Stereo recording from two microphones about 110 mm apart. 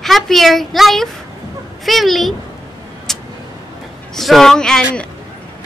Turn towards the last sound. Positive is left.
turn(degrees=5)  # may be behind; listen again after turning